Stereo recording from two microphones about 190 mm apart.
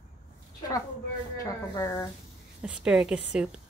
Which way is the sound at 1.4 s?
15° left (ahead or behind).